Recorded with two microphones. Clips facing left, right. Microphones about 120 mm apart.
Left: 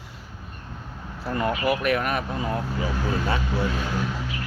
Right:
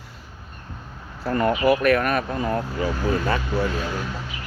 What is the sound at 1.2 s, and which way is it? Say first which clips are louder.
Speech: right 4 dB; 45° right (ahead or behind).